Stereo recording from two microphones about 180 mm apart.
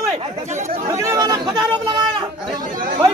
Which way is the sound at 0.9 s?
15° right (ahead or behind).